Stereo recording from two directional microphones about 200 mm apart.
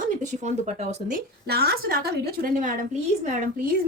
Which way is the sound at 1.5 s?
50° right (ahead or behind).